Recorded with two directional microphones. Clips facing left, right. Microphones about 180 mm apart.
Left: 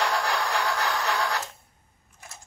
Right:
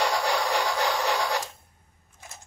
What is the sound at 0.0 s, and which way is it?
Radio, 10° right (ahead or behind).